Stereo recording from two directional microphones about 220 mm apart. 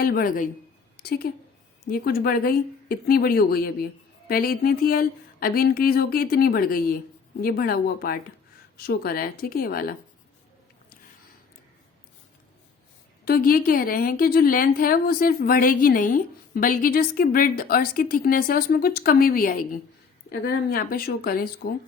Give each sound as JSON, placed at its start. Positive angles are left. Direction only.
{"t": 0.0, "sound": "a woman's voice", "side_deg": 40}
{"t": 13.2, "sound": "a woman's voice", "side_deg": 40}